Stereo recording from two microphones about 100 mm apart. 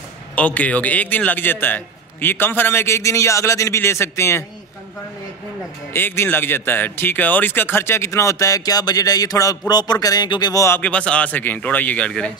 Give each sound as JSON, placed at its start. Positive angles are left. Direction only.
{"t": 0.4, "sound": "a man's voice", "side_deg": 15}
{"t": 5.9, "sound": "speech", "side_deg": 20}
{"t": 10.8, "sound": "a man's voice", "side_deg": 10}